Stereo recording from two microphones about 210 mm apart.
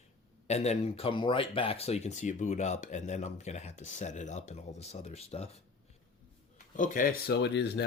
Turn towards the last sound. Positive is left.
turn(degrees=55)  # may be behind; listen again after turning